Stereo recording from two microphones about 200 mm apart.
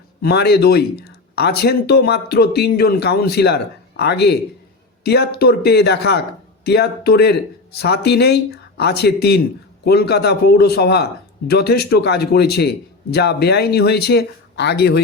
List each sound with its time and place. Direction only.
0.2 s a man's voice: 55° left (ahead or behind)